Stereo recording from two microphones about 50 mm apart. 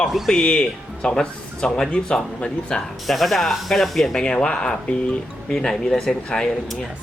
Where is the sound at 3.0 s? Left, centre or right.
Centre.